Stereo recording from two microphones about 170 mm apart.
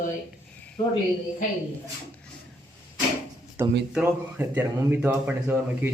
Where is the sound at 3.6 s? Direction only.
15° right (ahead or behind).